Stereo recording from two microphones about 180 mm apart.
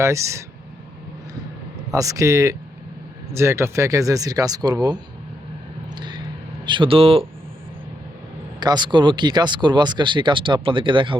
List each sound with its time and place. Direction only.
0.0 s speech: 15° right (ahead or behind)
1.9 s speech: 20° right (ahead or behind)
6.7 s speech: 30° right (ahead or behind)
8.6 s speech: 25° right (ahead or behind)